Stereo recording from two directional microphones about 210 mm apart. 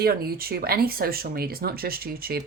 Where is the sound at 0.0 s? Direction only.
45° right (ahead or behind).